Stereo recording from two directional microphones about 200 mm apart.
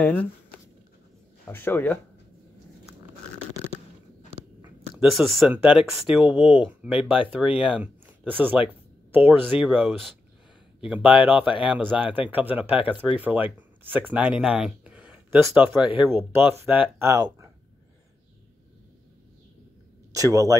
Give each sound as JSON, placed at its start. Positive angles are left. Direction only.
{"t": 0.0, "sound": "speech", "side_deg": 5}
{"t": 1.5, "sound": "speech", "side_deg": 10}
{"t": 4.9, "sound": "speech", "side_deg": 0}
{"t": 20.1, "sound": "speech", "side_deg": -15}